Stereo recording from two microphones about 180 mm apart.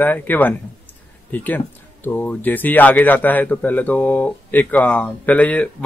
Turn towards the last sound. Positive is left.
turn(degrees=5)  # may be behind; listen again after turning